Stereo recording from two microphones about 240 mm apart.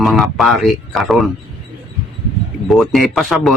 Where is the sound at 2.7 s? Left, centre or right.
Centre.